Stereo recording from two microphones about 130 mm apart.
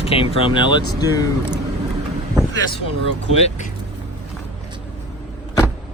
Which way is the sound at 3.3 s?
55° left (ahead or behind).